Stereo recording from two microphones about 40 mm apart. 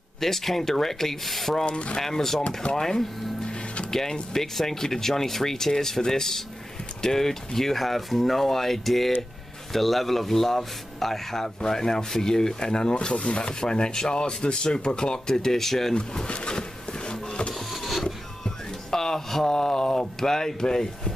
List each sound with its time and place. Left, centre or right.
0.2 s speech: centre
15.9 s a sound: left
17.6 s vehicle: centre
18.0 s speech: centre